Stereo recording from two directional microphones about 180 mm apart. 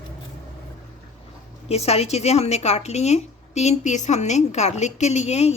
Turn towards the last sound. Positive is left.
turn(degrees=35)  # may be behind; listen again after turning